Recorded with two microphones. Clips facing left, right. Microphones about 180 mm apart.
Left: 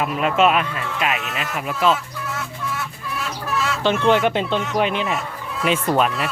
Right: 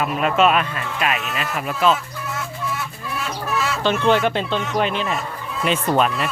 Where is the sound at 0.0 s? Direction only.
20° left (ahead or behind).